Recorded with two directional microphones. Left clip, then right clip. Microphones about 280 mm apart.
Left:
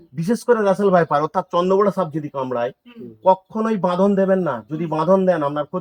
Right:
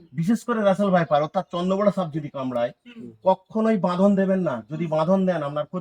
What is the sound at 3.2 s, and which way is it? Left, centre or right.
Speech, centre.